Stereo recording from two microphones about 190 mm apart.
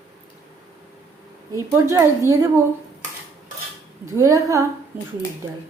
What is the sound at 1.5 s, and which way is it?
Speech, 15° right (ahead or behind).